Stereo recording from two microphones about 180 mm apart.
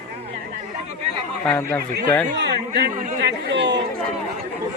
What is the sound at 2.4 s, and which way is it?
A man's voice, 65° right (ahead or behind).